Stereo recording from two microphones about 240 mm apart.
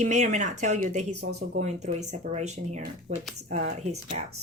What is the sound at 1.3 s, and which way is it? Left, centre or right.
Speech, right.